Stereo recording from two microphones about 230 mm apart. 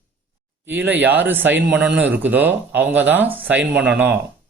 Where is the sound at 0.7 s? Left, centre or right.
Centre.